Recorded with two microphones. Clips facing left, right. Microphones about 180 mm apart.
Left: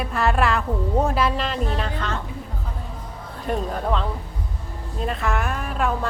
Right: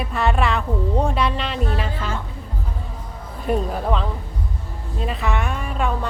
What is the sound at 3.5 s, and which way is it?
A woman's voice, 5° right (ahead or behind).